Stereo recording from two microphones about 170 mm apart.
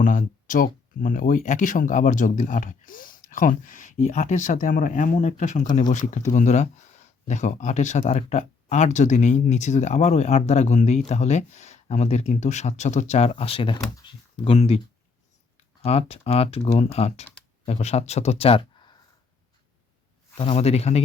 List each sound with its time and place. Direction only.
0.0 s speech: 50° left (ahead or behind); by 14.8 s 35° left (ahead or behind)
15.8 s speech: 35° left (ahead or behind)
20.3 s speech: 35° left (ahead or behind)